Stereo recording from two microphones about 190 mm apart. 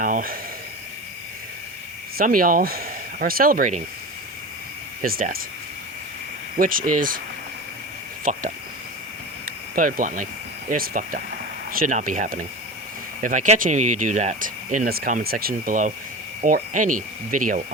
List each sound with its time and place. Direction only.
0.0 s speech: 45° right (ahead or behind)
2.1 s speech: 50° right (ahead or behind)
5.0 s speech: 50° right (ahead or behind)
6.6 s speech: 45° right (ahead or behind)
8.2 s speech: 40° right (ahead or behind)
9.7 s speech: 45° right (ahead or behind)